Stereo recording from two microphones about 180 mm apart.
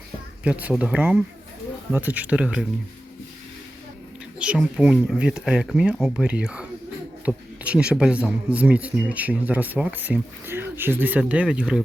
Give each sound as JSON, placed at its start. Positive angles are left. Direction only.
{"t": 0.4, "sound": "speech", "side_deg": -5}
{"t": 4.4, "sound": "speech", "side_deg": -5}